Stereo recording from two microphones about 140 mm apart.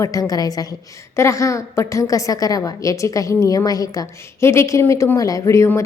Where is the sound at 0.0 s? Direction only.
25° left (ahead or behind).